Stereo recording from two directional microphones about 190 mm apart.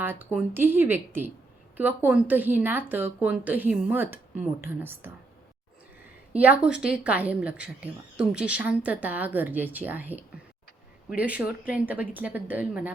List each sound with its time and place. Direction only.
0.0 s a woman's voice: 10° right (ahead or behind)
6.4 s a woman's voice: 5° right (ahead or behind)